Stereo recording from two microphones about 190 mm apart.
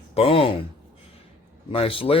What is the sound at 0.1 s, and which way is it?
Speech, 30° left (ahead or behind).